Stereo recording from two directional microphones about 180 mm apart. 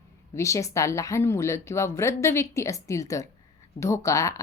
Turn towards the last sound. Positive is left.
turn(degrees=15)  # may be behind; listen again after turning